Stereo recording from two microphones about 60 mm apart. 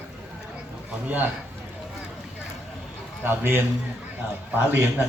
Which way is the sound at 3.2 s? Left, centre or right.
Right.